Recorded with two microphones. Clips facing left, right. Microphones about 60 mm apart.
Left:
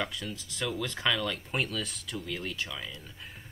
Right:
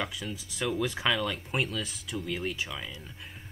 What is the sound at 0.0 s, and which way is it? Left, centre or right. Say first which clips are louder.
Speech: even; centre.